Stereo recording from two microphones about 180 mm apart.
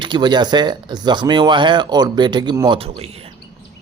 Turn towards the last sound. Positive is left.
turn(degrees=-35)  # may be behind; listen again after turning